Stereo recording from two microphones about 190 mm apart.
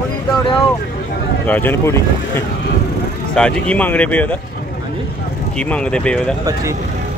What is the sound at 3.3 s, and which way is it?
Speech, 5° left (ahead or behind).